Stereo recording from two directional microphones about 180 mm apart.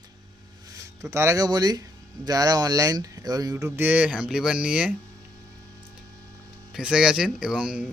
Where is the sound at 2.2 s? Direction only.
20° right (ahead or behind).